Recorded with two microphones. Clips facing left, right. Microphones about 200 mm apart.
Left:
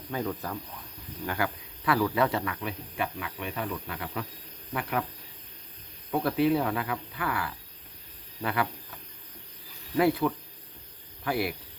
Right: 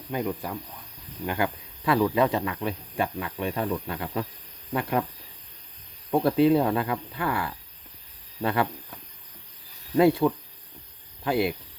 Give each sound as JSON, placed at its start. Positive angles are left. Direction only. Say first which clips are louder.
{"t": 0.1, "sound": "speech", "louder": "right 3 dB", "side_deg": -15}
{"t": 6.1, "sound": "speech", "louder": "right 5 dB", "side_deg": -30}
{"t": 10.0, "sound": "speech", "louder": "right 5 dB", "side_deg": -25}